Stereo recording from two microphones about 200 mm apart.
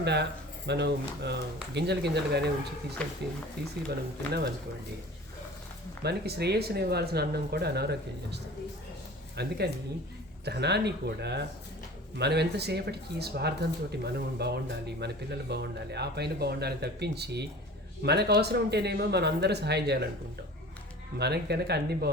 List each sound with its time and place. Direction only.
0.0 s speech: 55° right (ahead or behind)
3.0 s speech: 5° left (ahead or behind)
3.6 s speech: 55° right (ahead or behind)
6.0 s speech: 55° right (ahead or behind)
21.2 s speech: 55° right (ahead or behind)